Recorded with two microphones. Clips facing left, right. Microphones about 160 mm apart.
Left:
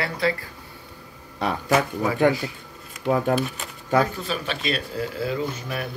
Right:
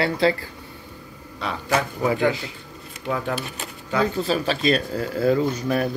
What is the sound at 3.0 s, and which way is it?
Speech, 40° left (ahead or behind).